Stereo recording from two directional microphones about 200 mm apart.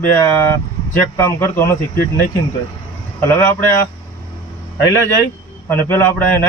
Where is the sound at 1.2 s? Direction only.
15° left (ahead or behind).